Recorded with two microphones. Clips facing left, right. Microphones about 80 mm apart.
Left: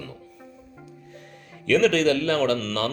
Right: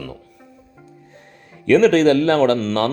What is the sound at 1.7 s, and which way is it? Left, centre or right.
A man's voice, right.